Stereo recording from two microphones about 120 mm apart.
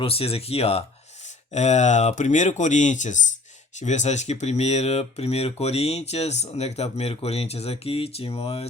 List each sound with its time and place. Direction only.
0.0 s speech: 55° left (ahead or behind)
1.5 s speech: 70° left (ahead or behind); by 3.2 s 90° left
3.8 s speech: 75° left (ahead or behind); by 8.6 s 55° left (ahead or behind)